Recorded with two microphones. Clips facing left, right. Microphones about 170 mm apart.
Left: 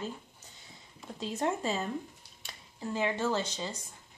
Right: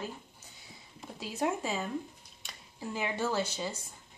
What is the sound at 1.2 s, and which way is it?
Speech, 5° right (ahead or behind).